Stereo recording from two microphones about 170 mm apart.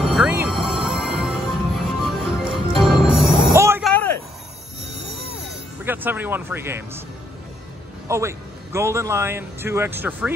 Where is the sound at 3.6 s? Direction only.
15° right (ahead or behind).